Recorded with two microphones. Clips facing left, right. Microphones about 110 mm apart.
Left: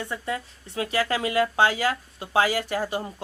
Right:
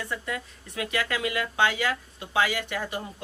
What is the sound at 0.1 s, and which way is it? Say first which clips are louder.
A woman's voice: left 3 dB; 30° left (ahead or behind).